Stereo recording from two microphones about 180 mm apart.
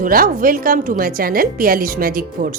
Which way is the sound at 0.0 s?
50° right (ahead or behind).